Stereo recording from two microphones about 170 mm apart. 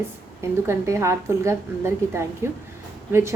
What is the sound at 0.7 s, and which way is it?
A woman's voice, 15° right (ahead or behind).